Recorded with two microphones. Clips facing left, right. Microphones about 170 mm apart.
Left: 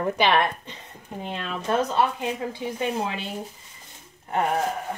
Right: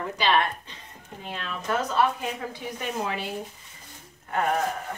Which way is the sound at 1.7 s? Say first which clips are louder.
Left 4 dB; 25° left (ahead or behind).